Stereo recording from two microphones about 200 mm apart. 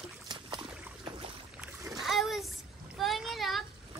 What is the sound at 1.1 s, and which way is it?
Boat, 25° right (ahead or behind).